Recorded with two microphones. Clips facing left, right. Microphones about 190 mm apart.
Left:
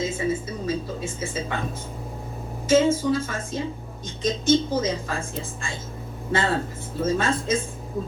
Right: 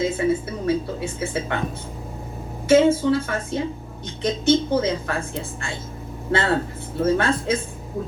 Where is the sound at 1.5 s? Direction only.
65° right (ahead or behind).